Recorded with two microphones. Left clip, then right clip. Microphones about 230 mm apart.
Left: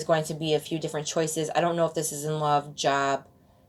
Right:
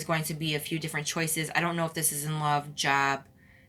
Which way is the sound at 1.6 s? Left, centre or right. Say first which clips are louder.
Left 5 dB; right.